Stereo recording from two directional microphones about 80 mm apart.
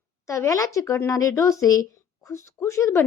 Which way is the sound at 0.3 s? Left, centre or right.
Left.